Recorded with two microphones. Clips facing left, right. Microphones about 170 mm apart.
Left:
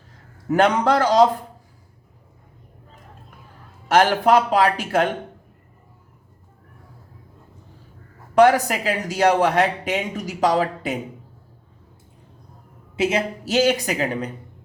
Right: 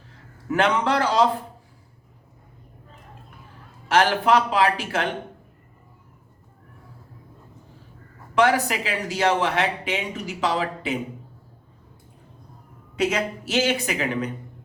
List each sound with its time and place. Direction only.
0.4 s speech: 40° left (ahead or behind)
3.8 s speech: 40° left (ahead or behind)
8.4 s speech: 40° left (ahead or behind)
13.1 s speech: 35° left (ahead or behind)